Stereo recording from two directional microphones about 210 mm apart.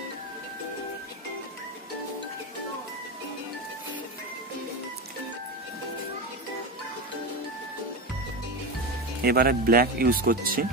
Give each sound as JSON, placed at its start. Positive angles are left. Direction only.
{"t": 9.2, "sound": "speech", "side_deg": -45}